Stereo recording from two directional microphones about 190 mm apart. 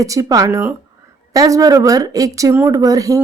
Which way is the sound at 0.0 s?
15° right (ahead or behind).